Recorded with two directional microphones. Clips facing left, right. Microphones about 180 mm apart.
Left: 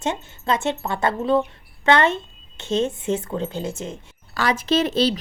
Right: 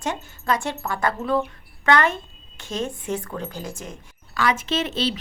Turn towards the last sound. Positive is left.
turn(degrees=40)  # may be behind; listen again after turning